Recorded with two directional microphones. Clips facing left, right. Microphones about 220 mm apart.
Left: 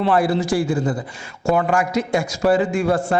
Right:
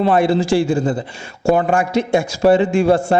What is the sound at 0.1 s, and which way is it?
Speech, 25° right (ahead or behind).